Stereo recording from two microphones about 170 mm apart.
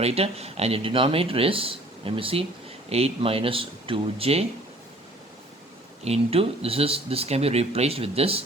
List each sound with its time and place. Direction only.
0.0 s speech: 35° right (ahead or behind)
6.1 s speech: 35° right (ahead or behind)